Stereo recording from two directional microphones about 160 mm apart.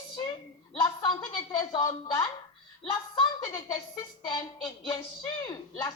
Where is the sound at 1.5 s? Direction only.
25° left (ahead or behind).